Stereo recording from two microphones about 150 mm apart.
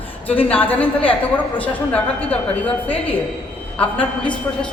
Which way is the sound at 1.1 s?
10° left (ahead or behind).